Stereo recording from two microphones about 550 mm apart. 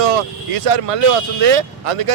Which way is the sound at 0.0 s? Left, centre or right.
Right.